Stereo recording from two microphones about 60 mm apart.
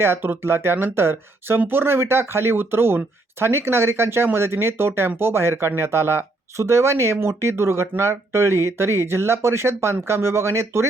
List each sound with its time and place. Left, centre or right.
0.0 s speech: right